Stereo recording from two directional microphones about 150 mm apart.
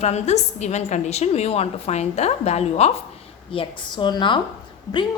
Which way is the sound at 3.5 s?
35° left (ahead or behind).